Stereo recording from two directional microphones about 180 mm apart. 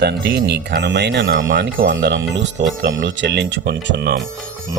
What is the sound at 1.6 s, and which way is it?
Speech, 55° right (ahead or behind).